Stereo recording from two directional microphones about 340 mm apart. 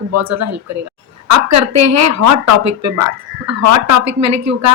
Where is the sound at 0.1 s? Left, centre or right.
Right.